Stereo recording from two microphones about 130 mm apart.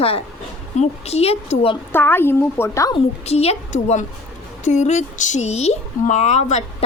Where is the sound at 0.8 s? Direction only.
55° left (ahead or behind).